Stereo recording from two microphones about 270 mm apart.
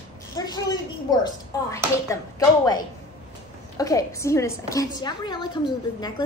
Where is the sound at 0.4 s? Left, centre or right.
Centre.